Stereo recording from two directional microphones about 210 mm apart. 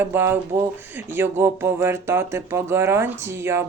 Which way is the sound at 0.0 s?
10° right (ahead or behind).